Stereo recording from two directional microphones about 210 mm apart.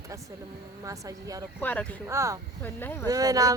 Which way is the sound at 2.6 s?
10° left (ahead or behind).